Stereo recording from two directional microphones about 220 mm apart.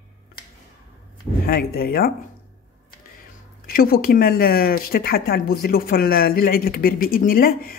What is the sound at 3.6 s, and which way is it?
Speech, 45° left (ahead or behind).